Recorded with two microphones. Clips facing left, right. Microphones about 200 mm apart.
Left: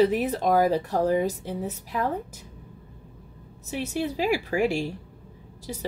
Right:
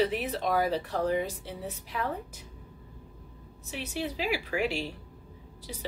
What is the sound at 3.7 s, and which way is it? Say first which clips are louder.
Speech: left 6 dB; 45° left (ahead or behind).